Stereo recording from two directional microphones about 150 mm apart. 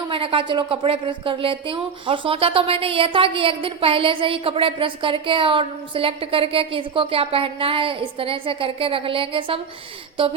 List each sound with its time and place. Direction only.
0.1 s speech: 35° right (ahead or behind)